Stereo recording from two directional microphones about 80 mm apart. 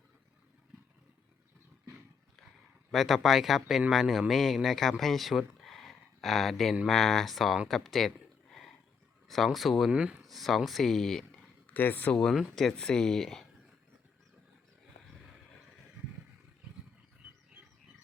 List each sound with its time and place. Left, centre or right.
2.9 s speech: centre
7.7 s a sound: centre
9.2 s speech: centre
9.9 s speech: centre
10.2 s speech: centre
11.6 s speech: left
12.1 s speech: centre